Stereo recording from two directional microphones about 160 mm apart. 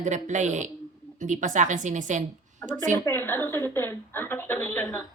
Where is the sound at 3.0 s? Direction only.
15° left (ahead or behind).